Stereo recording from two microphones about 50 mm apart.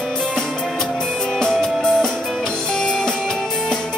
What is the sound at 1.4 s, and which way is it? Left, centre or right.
Music, centre.